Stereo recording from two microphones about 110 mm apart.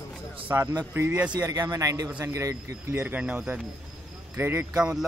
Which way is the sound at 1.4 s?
35° right (ahead or behind).